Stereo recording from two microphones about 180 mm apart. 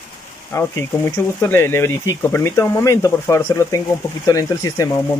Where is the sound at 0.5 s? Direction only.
15° left (ahead or behind).